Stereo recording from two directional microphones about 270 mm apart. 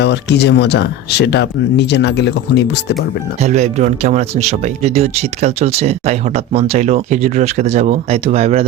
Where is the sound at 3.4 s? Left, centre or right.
Right.